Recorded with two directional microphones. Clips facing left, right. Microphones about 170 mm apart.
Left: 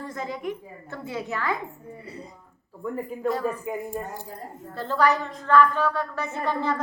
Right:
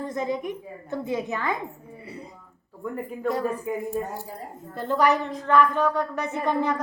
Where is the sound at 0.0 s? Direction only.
20° right (ahead or behind).